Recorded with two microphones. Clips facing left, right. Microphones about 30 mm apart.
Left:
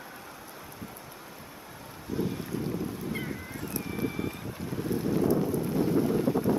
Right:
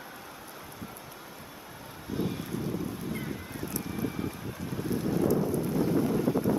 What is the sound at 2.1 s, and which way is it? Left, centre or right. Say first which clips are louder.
Boat: left 1 dB; centre.